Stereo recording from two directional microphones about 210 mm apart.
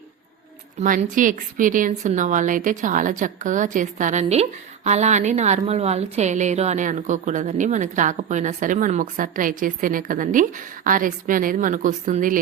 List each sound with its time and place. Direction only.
0.8 s a woman's voice: 40° right (ahead or behind)